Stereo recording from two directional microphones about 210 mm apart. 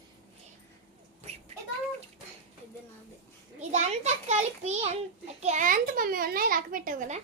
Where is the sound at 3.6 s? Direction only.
35° right (ahead or behind).